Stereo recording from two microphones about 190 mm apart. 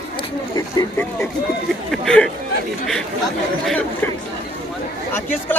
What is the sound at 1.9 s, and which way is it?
Speech, 5° left (ahead or behind).